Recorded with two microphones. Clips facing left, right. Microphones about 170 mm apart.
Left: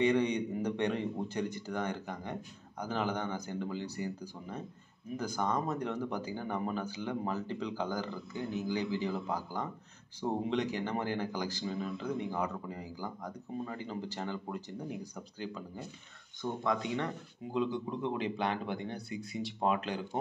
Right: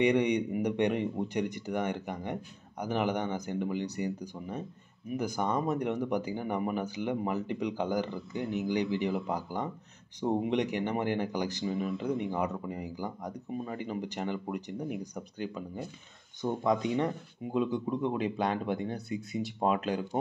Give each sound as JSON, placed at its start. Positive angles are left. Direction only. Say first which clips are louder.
{"t": 0.0, "sound": "speech", "louder": "right 3 dB", "side_deg": -15}